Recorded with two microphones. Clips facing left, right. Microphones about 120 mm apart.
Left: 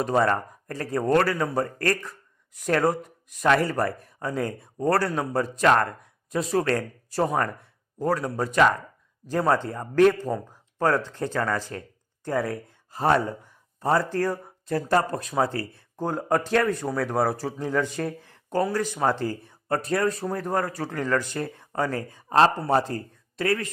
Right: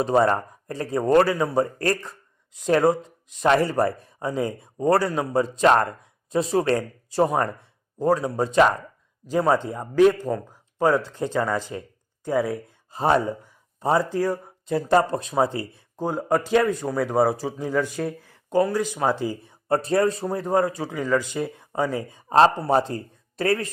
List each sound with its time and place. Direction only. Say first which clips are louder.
0.0 s speech: right 3 dB; 20° right (ahead or behind)
9.4 s speech: right 2 dB; 15° right (ahead or behind)
19.6 s speech: right 4 dB; 25° right (ahead or behind)
23.4 s speech: right 2 dB; 35° right (ahead or behind)